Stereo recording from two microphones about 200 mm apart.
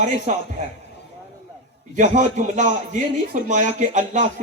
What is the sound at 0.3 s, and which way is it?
Speech, 40° right (ahead or behind).